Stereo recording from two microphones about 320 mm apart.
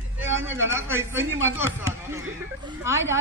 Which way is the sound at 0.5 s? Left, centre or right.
Centre.